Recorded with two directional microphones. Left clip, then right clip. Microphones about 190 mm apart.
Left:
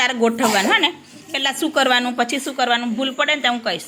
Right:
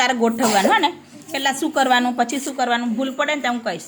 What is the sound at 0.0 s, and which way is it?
A woman's voice, 15° right (ahead or behind).